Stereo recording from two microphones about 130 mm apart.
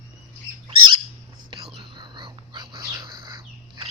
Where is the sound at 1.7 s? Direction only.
35° right (ahead or behind).